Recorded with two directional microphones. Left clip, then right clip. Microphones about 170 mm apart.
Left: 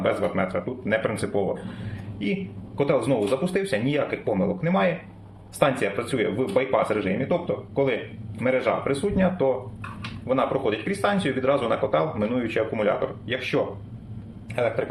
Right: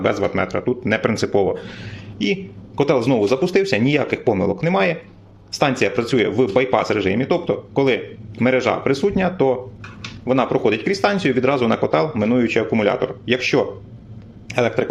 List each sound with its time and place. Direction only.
0.0 s speech: 70° right (ahead or behind)
2.7 s a man's voice: 55° right (ahead or behind)